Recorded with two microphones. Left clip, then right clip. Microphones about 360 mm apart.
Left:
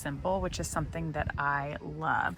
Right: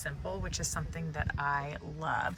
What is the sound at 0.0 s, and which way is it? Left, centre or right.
A woman's voice, centre.